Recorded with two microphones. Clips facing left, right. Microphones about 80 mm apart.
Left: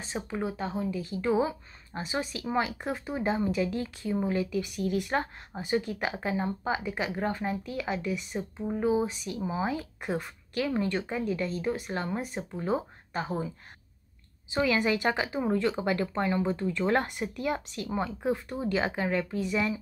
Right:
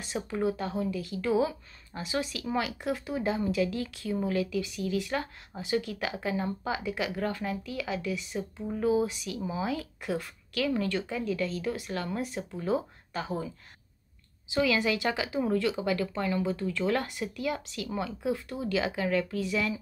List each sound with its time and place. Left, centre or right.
0.3 s speech: left
4.6 s a woman's voice: left
7.4 s a woman's voice: left
8.5 s a woman's voice: left
14.5 s a woman's voice: left